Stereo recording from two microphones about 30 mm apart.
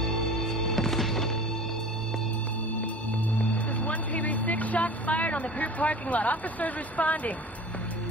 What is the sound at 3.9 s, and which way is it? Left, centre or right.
Vehicle, left.